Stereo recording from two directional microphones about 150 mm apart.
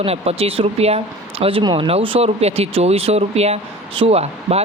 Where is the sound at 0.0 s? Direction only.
40° right (ahead or behind).